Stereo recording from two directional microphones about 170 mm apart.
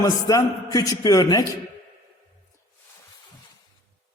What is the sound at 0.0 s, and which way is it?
A man's voice, 20° left (ahead or behind).